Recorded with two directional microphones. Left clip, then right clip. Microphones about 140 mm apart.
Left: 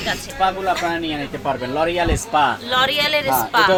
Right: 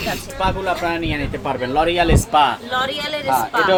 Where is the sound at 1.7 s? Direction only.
20° right (ahead or behind).